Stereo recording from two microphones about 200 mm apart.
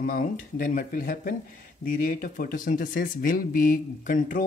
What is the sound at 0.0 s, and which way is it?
Speech, 45° left (ahead or behind).